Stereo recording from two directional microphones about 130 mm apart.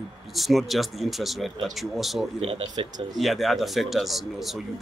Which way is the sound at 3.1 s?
Centre (ahead or behind).